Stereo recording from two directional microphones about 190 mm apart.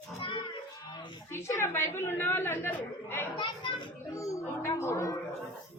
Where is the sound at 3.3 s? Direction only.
25° left (ahead or behind).